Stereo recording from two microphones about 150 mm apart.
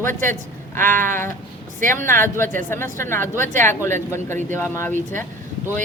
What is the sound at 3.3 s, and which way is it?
Speech, 55° right (ahead or behind).